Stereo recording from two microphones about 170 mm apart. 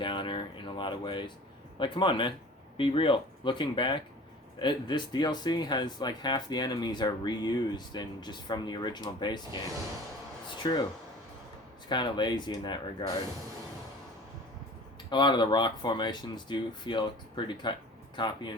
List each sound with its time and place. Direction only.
0.0 s a sound: 30° left (ahead or behind)
1.8 s speech: 30° left (ahead or behind)
11.9 s speech: 25° left (ahead or behind)
15.1 s speech: 25° left (ahead or behind)